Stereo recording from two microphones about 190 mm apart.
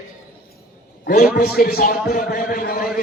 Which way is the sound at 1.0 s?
50° left (ahead or behind).